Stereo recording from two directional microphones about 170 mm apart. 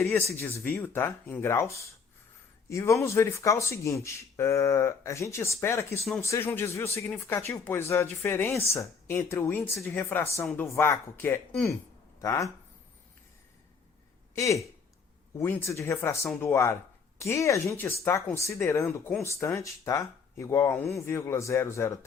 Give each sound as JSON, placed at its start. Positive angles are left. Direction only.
{"t": 0.0, "sound": "speech", "side_deg": 10}
{"t": 14.3, "sound": "speech", "side_deg": 20}